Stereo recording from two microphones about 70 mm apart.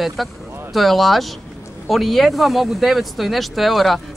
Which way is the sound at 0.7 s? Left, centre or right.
Centre.